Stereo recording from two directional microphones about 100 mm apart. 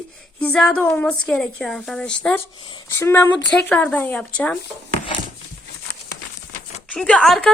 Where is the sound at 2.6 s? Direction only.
50° left (ahead or behind).